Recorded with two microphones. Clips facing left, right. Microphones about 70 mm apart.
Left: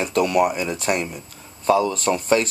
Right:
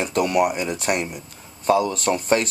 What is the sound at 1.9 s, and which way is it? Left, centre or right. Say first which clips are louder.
Speech: even; right.